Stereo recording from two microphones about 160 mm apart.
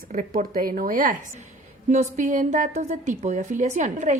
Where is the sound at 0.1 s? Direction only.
60° right (ahead or behind).